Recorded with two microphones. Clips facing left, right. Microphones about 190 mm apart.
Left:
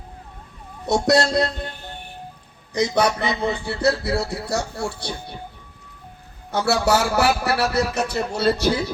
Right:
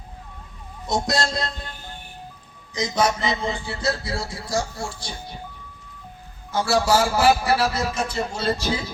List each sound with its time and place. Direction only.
0.9 s a man's voice: 65° left (ahead or behind)
2.7 s a man's voice: 65° left (ahead or behind)
6.5 s a man's voice: 65° left (ahead or behind)